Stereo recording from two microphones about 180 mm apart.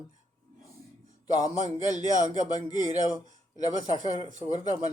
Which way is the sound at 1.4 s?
20° left (ahead or behind).